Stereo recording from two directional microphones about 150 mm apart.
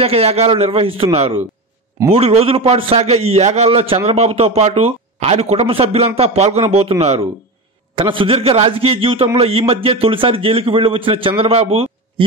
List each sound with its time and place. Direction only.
0.0 s a man's voice: 40° right (ahead or behind)